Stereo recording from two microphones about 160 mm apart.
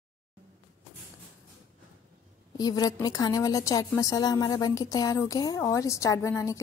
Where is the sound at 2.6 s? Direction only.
25° left (ahead or behind).